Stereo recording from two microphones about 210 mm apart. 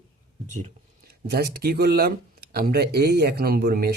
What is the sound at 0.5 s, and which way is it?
Speech, 40° right (ahead or behind).